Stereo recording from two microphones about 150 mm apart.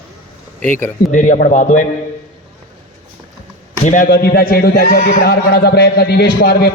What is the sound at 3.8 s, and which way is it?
A man's voice, 60° left (ahead or behind).